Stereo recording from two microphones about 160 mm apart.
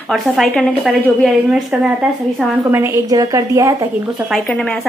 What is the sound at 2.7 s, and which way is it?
A woman's voice, 15° right (ahead or behind).